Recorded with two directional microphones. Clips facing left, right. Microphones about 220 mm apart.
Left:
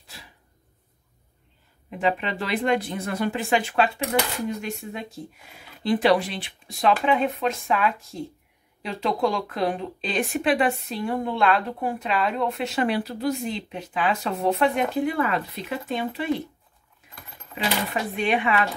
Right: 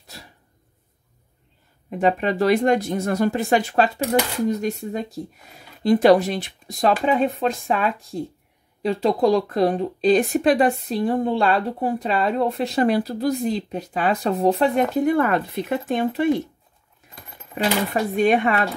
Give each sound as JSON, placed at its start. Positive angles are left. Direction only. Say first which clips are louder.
{"t": 0.0, "sound": "a sound", "louder": "right 4 dB", "side_deg": -40}
{"t": 1.9, "sound": "speech", "louder": "right 5 dB", "side_deg": -45}
{"t": 17.9, "sound": "speech", "louder": "right 8 dB", "side_deg": -40}